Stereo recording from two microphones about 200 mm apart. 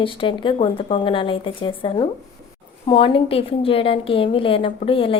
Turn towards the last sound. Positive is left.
turn(degrees=25)  # may be behind; listen again after turning